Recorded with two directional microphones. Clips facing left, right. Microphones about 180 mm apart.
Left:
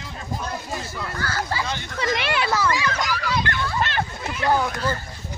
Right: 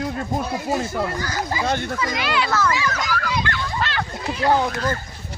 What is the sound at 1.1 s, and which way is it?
Speech, 15° right (ahead or behind).